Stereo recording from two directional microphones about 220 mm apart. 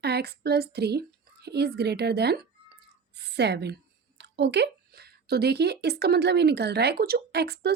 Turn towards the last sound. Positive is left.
turn(degrees=-45)  # may be behind; listen again after turning